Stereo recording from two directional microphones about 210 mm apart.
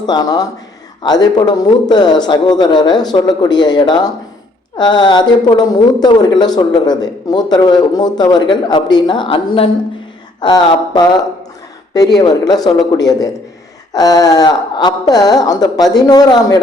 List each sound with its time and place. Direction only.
0.0 s a woman's voice: 20° left (ahead or behind)